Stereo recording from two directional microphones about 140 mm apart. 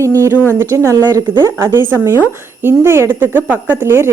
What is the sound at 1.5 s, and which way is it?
Speech, 15° right (ahead or behind).